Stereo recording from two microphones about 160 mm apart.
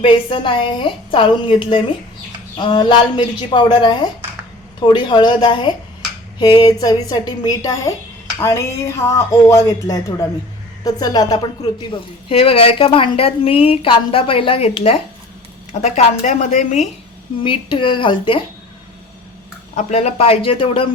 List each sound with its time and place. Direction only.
0.0 s a woman's voice: 35° left (ahead or behind); by 16.8 s 50° left (ahead or behind)
17.4 s speech: 30° left (ahead or behind)
19.7 s speech: 45° left (ahead or behind)